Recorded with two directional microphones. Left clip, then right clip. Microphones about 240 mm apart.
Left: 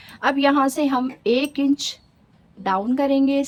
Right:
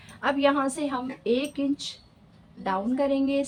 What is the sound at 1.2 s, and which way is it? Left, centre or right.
A woman's voice, left.